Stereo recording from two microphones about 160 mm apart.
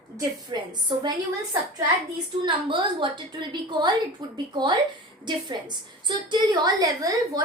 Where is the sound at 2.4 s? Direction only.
30° right (ahead or behind).